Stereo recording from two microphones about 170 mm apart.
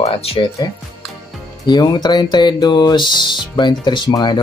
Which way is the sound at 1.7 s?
25° left (ahead or behind).